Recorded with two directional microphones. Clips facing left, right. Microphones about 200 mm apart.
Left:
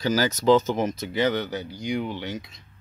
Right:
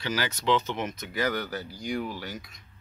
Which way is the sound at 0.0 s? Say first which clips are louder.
Left 8 dB; 40° left (ahead or behind).